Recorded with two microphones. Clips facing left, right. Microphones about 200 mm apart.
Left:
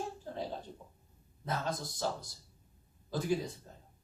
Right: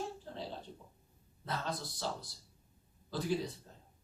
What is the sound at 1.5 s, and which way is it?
Speech, 45° left (ahead or behind).